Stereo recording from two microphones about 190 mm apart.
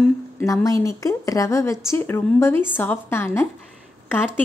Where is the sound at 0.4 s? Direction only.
15° left (ahead or behind).